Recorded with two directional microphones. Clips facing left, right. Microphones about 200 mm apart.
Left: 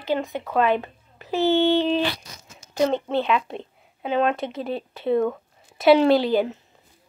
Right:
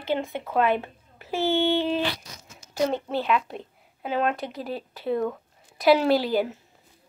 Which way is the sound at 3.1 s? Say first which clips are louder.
Left 3 dB; 5° right (ahead or behind).